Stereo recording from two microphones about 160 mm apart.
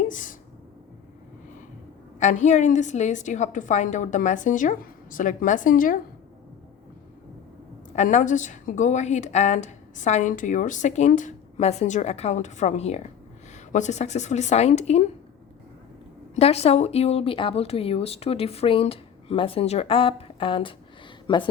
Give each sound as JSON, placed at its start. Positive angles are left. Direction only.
{"t": 0.1, "sound": "speech", "side_deg": 55}
{"t": 2.1, "sound": "a woman's voice", "side_deg": 50}
{"t": 7.9, "sound": "a woman's voice", "side_deg": 50}
{"t": 16.3, "sound": "speech", "side_deg": 40}